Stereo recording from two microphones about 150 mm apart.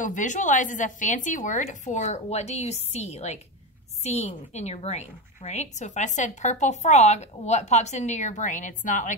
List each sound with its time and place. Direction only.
0.0 s a woman's voice: 55° left (ahead or behind)